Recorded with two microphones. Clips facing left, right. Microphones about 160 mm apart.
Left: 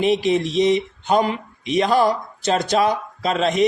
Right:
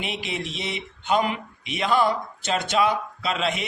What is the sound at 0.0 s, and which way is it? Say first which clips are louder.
Speech: left 13 dB; 40° left (ahead or behind).